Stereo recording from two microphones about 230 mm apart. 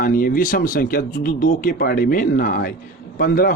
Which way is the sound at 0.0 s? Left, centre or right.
Left.